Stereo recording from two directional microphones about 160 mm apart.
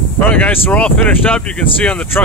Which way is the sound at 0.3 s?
10° left (ahead or behind).